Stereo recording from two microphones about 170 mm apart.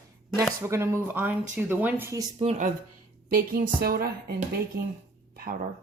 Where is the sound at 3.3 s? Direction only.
55° right (ahead or behind).